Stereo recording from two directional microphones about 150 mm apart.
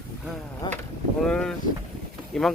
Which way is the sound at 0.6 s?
30° left (ahead or behind).